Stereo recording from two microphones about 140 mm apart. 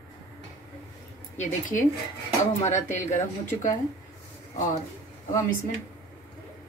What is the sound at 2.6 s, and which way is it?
A woman's voice, 60° left (ahead or behind).